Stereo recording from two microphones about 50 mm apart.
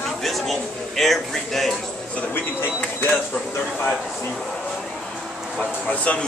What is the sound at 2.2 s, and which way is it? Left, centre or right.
Speech, left.